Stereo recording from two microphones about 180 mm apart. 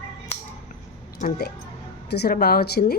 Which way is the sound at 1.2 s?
40° left (ahead or behind).